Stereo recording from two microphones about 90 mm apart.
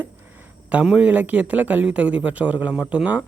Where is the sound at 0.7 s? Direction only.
10° right (ahead or behind).